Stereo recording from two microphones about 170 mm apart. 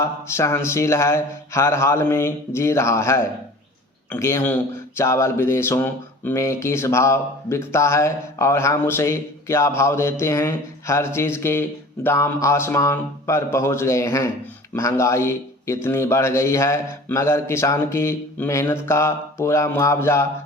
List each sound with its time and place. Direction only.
0.0 s speech: 15° left (ahead or behind)